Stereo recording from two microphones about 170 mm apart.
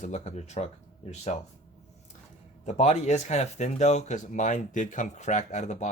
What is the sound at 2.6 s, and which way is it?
Speech, 40° left (ahead or behind).